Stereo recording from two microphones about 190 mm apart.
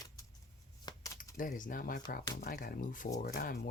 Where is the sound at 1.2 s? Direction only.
45° left (ahead or behind).